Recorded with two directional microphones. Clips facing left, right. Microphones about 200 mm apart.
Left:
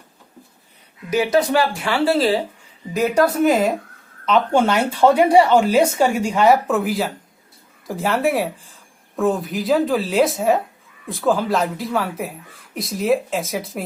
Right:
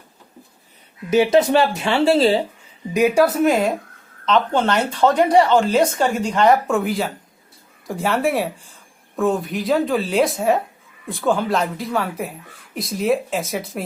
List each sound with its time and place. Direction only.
1.1 s speech: 25° right (ahead or behind)
2.9 s a woman's voice: 15° right (ahead or behind)
3.3 s speech: centre (ahead or behind)